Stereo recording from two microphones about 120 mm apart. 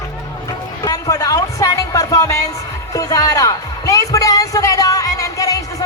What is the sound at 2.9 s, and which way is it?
Music, 30° left (ahead or behind).